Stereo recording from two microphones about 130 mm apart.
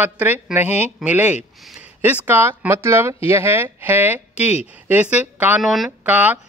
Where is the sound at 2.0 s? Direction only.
15° right (ahead or behind).